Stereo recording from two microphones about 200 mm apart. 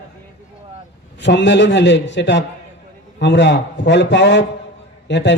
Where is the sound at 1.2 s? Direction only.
60° left (ahead or behind).